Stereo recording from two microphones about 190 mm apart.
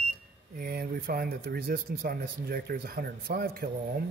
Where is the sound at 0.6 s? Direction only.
55° right (ahead or behind).